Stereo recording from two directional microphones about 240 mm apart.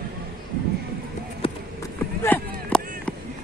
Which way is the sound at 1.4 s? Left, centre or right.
Left.